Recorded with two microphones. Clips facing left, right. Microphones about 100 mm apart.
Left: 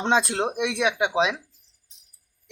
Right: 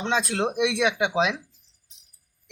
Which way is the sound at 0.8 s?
15° left (ahead or behind).